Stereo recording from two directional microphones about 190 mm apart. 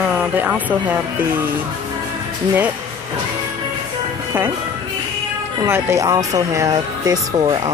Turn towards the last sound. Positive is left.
turn(degrees=-20)  # may be behind; listen again after turning